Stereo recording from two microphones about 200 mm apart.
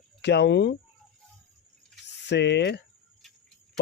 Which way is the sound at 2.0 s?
60° left (ahead or behind).